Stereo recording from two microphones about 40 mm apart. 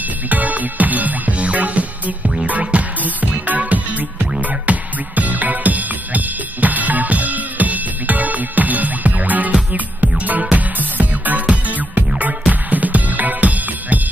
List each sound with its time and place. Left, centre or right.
0.3 s music: right